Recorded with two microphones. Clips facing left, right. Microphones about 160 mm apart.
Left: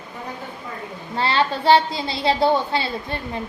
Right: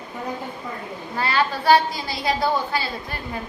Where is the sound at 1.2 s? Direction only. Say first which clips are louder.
Left 2 dB; 25° left (ahead or behind).